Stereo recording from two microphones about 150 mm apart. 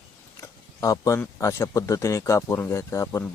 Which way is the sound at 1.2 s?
20° left (ahead or behind).